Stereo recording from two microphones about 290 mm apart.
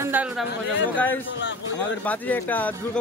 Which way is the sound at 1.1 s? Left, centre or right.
Left.